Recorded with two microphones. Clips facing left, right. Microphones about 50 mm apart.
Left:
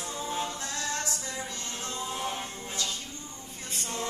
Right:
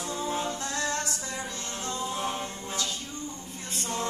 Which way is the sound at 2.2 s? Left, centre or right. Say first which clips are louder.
Right 2 dB; right.